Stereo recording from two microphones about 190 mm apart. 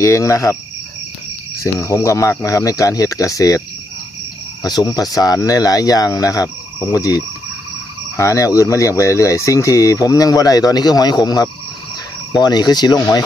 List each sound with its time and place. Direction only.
0.0 s speech: 15° left (ahead or behind)
1.6 s speech: 15° left (ahead or behind)
4.6 s speech: 20° left (ahead or behind)
8.2 s speech: 15° left (ahead or behind)